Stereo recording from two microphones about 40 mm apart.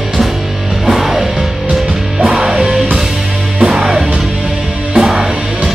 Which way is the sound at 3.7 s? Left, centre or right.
Centre.